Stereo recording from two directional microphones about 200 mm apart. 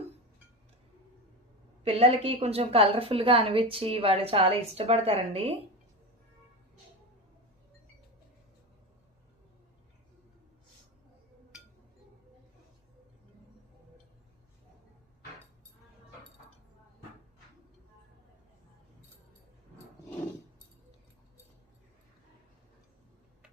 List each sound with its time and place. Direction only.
1.8 s a woman's voice: 30° right (ahead or behind)